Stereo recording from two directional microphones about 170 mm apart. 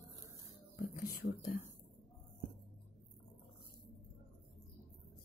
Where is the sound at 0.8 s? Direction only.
60° left (ahead or behind).